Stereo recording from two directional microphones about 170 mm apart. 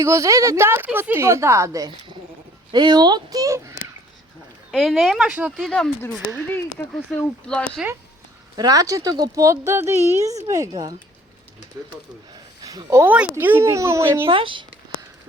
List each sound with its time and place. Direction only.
0.0 s a woman's voice: 15° right (ahead or behind)
4.7 s speech: centre (ahead or behind)
8.5 s a woman's voice: 20° right (ahead or behind)
12.6 s a woman's voice: 20° right (ahead or behind)
14.3 s speech: 30° right (ahead or behind)